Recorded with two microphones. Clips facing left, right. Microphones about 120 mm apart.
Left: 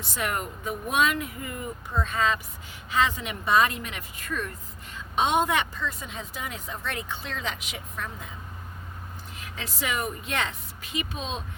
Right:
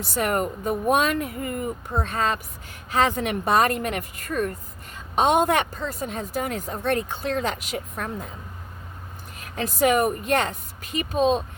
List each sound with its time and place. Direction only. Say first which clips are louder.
0.1 s a woman's voice: right 6 dB; 45° right (ahead or behind)
9.4 s a woman's voice: right 12 dB; 50° right (ahead or behind)